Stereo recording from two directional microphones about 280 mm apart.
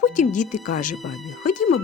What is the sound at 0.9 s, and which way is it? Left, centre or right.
Speech, centre.